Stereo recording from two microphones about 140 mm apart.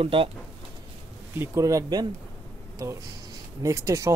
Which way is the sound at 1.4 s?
20° right (ahead or behind).